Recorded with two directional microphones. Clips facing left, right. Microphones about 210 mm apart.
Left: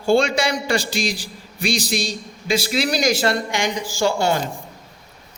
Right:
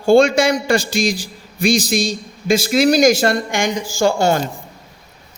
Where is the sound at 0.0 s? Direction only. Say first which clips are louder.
Right 6 dB; 45° right (ahead or behind).